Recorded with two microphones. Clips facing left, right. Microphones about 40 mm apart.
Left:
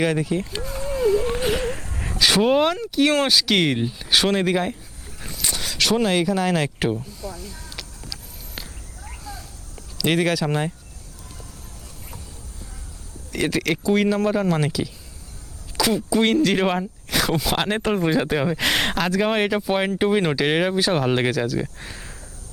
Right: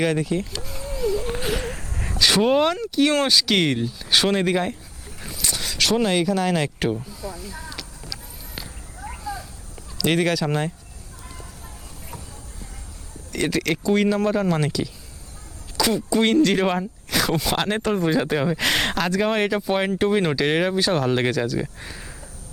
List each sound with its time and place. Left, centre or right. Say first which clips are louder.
0.0 s speech: even; centre
0.8 s a sound: left 5 dB; centre
3.8 s speech: left 1 dB; left
4.1 s speech: even; centre
9.0 s a sound: right 6 dB; centre
10.0 s speech: even; centre
13.3 s speech: even; centre